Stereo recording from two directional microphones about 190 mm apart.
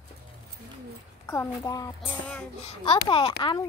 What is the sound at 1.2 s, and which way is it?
A woman's voice, 15° left (ahead or behind).